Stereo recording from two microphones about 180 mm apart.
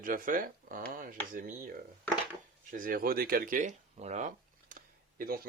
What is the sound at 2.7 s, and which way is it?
Speech, 50° right (ahead or behind).